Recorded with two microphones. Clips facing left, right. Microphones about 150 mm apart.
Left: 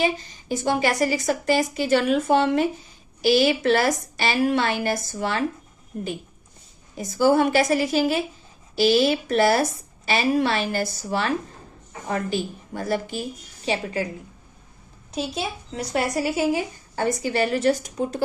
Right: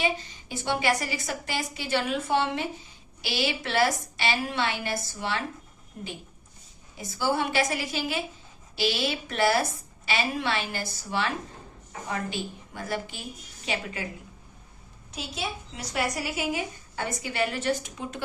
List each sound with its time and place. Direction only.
0.0 s a woman's voice: 40° left (ahead or behind)
12.7 s speech: 40° left (ahead or behind)
15.1 s speech: 35° left (ahead or behind)